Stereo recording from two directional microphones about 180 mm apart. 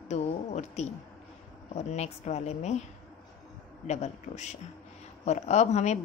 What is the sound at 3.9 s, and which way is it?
A woman's voice, 40° left (ahead or behind).